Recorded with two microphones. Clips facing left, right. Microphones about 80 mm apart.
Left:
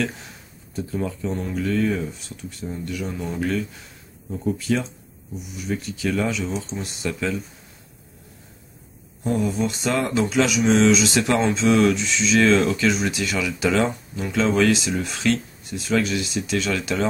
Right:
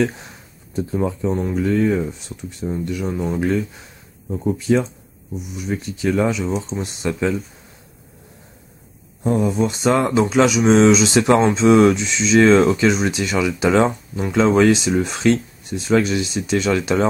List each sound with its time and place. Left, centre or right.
0.7 s speech: right
9.2 s speech: right